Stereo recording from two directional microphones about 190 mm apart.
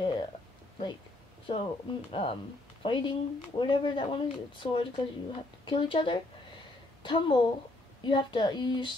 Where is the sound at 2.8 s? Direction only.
25° left (ahead or behind).